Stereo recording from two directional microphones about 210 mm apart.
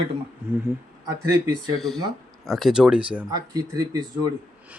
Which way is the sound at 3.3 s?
20° right (ahead or behind).